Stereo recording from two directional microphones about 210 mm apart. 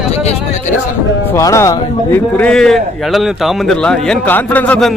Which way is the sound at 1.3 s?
15° left (ahead or behind).